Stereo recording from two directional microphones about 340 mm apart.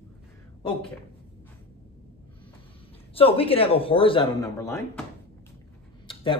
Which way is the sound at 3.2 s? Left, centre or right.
Centre.